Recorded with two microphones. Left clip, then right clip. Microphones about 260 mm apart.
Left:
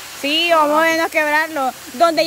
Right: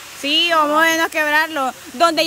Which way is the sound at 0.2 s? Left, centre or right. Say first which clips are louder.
Left 1 dB; centre.